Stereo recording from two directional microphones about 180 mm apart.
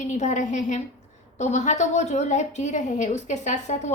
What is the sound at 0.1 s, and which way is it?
A woman's voice, 40° left (ahead or behind).